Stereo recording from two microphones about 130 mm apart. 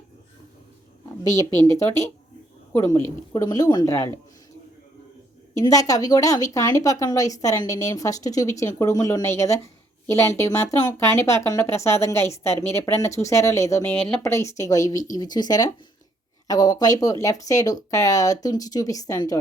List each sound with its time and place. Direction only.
1.8 s speech: 20° left (ahead or behind)
5.5 s speech: 25° left (ahead or behind)